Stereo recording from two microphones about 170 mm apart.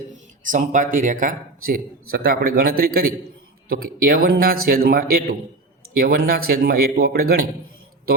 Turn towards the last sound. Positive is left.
turn(degrees=-60)  # may be behind; listen again after turning